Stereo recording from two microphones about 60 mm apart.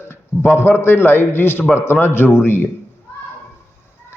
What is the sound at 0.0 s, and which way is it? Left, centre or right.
A man's voice, left.